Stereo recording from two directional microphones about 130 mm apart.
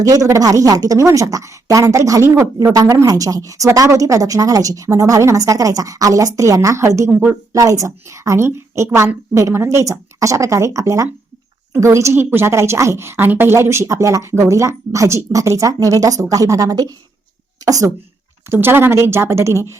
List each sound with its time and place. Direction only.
0.0 s a woman's voice: 25° right (ahead or behind)
7.5 s a woman's voice: 25° right (ahead or behind)